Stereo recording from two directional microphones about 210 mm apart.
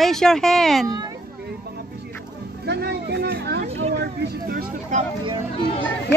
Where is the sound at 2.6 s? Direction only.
50° right (ahead or behind).